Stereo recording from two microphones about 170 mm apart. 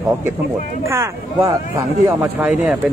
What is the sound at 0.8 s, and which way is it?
A man's voice, 20° right (ahead or behind).